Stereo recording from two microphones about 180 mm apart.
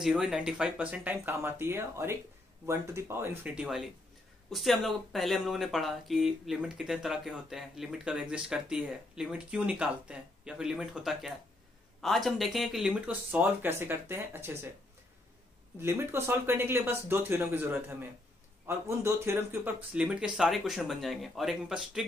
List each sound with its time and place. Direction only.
0.0 s speech: centre (ahead or behind)
15.8 s speech: 15° right (ahead or behind)